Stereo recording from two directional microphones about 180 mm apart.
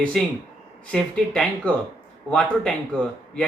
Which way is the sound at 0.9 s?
5° left (ahead or behind).